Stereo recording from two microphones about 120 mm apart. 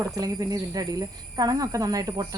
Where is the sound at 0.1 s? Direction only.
30° right (ahead or behind).